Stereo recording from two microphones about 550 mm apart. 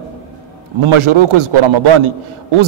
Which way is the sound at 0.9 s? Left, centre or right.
Right.